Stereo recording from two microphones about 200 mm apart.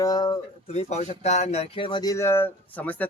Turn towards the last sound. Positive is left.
turn(degrees=10)  # may be behind; listen again after turning